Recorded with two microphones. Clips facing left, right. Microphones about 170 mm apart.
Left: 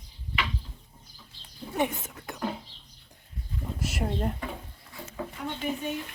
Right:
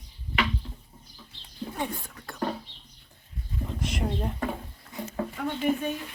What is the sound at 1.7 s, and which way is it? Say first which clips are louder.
Whispering: left 6 dB; 20° left (ahead or behind).